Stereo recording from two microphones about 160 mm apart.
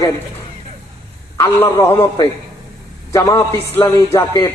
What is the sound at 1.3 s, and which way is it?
A man's voice, 20° left (ahead or behind).